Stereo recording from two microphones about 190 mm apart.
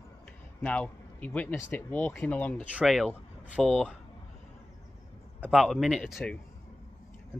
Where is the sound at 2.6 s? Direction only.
5° right (ahead or behind).